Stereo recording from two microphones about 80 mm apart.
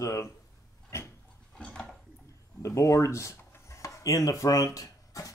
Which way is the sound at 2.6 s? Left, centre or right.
Left.